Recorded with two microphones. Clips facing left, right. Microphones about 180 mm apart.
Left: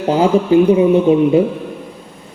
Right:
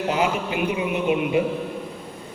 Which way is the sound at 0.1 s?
30° left (ahead or behind).